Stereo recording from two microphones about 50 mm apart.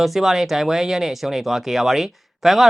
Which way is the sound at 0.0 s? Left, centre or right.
Centre.